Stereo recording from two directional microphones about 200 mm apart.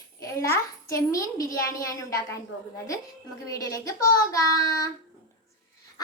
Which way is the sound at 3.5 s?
15° left (ahead or behind).